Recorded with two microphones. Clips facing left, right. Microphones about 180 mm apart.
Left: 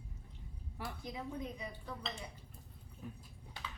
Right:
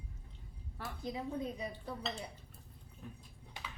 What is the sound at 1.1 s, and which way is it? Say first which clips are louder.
Speech: right 5 dB; 35° right (ahead or behind).